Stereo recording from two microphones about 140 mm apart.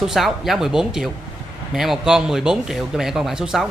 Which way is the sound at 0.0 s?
Centre (ahead or behind).